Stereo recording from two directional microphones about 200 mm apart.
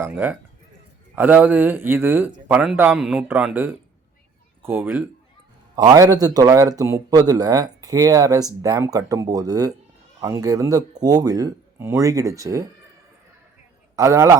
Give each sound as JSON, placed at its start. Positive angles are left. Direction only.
{"t": 0.0, "sound": "a man's voice", "side_deg": -10}
{"t": 13.9, "sound": "a man's voice", "side_deg": -15}